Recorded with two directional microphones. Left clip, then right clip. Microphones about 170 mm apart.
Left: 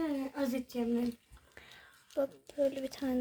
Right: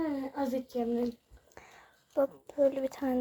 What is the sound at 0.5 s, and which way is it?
Speech, 35° left (ahead or behind).